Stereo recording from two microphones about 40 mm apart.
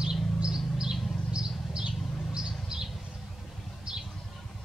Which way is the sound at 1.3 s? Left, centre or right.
Centre.